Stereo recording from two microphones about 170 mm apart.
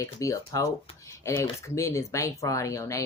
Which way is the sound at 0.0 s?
20° left (ahead or behind).